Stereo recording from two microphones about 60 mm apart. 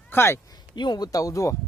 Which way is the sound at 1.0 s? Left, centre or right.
Left.